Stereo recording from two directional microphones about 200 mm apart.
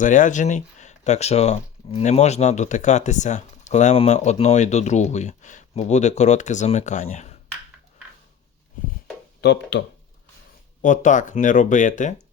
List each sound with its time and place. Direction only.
0.0 s speech: 40° left (ahead or behind)
9.4 s speech: 60° left (ahead or behind)
10.8 s speech: 40° left (ahead or behind)